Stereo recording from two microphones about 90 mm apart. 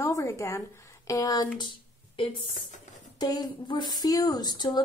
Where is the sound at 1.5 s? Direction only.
70° left (ahead or behind).